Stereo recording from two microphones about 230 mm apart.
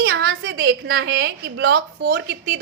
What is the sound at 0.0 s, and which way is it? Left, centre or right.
A woman's voice, right.